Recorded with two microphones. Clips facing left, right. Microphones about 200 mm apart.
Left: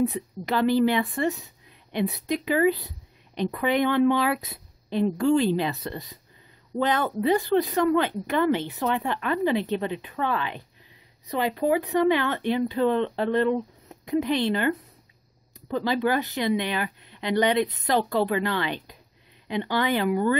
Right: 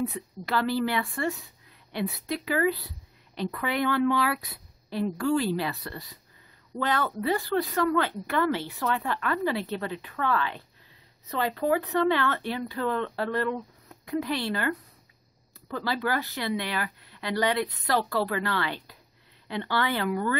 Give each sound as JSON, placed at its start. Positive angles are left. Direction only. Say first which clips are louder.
{"t": 0.0, "sound": "a woman's voice", "louder": "left 6 dB", "side_deg": 15}